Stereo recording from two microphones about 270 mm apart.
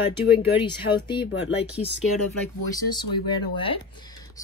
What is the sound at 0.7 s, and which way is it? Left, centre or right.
Speech, centre.